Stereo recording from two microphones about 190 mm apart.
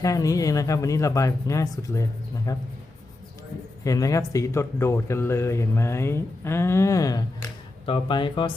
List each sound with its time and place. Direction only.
0.0 s speech: 15° left (ahead or behind)
3.8 s speech: 20° left (ahead or behind)